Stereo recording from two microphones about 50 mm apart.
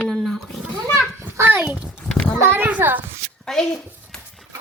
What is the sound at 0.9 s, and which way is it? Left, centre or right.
Children playing, right.